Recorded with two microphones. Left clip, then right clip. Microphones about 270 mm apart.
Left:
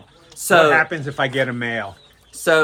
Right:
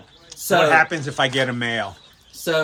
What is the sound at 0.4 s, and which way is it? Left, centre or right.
Speech, centre.